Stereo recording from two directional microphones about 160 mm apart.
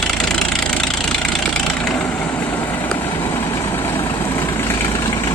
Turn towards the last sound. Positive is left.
turn(degrees=15)  # may be behind; listen again after turning